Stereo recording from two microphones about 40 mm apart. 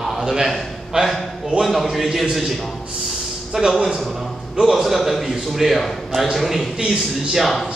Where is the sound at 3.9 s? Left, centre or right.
Centre.